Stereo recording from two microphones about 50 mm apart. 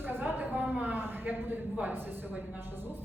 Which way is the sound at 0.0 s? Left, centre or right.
Right.